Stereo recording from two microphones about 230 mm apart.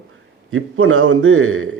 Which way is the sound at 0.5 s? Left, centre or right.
Right.